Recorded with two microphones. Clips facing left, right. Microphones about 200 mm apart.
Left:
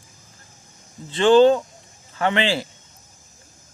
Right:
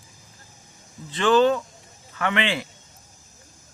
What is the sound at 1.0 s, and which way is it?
Speech, 30° left (ahead or behind).